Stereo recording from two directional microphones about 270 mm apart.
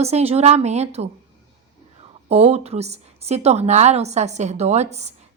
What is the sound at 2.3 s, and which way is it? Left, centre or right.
Speech, right.